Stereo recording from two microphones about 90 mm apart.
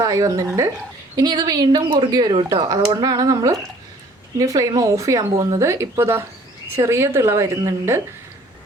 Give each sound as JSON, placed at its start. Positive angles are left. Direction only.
{"t": 0.0, "sound": "a woman's voice", "side_deg": -40}
{"t": 1.1, "sound": "a woman's voice", "side_deg": -50}
{"t": 5.6, "sound": "a woman's voice", "side_deg": -30}